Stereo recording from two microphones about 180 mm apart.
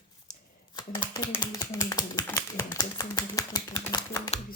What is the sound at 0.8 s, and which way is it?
Speech, 25° left (ahead or behind).